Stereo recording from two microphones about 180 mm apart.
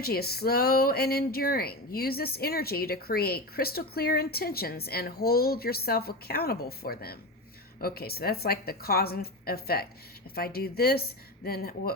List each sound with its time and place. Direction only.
0.0 s speech: 60° left (ahead or behind)